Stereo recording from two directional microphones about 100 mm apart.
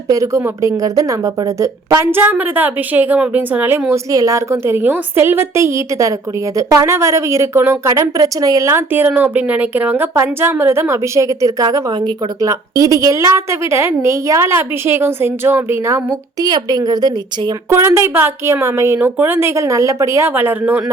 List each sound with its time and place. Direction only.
0.1 s speech: 30° right (ahead or behind)
4.1 s speech: 35° right (ahead or behind)
12.5 s speech: 35° right (ahead or behind)
16.5 s speech: 40° right (ahead or behind)
17.7 s speech: 25° right (ahead or behind)